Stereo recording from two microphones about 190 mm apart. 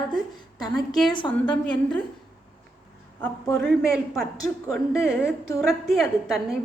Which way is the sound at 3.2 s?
5° left (ahead or behind).